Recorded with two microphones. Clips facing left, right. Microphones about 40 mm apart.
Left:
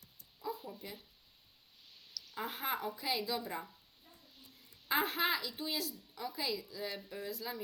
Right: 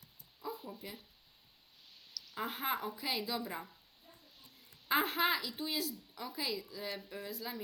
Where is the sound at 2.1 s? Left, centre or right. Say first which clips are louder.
Right 1 dB; centre.